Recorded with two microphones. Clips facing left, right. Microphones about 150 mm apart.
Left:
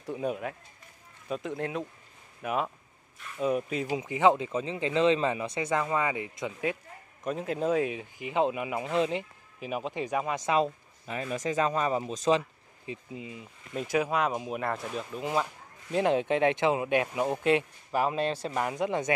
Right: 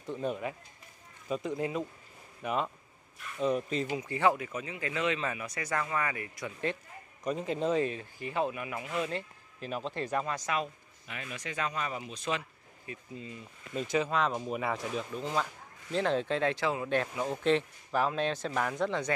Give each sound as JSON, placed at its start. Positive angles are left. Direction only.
{"t": 0.0, "sound": "speech", "side_deg": 10}
{"t": 3.9, "sound": "speech", "side_deg": 20}
{"t": 7.2, "sound": "speech", "side_deg": 0}
{"t": 9.1, "sound": "speech", "side_deg": 10}
{"t": 10.4, "sound": "speech", "side_deg": 30}
{"t": 15.9, "sound": "speech", "side_deg": 15}